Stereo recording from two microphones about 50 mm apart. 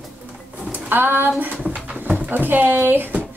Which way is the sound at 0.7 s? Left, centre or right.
Right.